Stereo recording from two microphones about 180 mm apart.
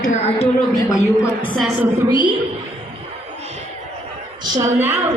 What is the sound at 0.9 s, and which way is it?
Speech, 25° left (ahead or behind).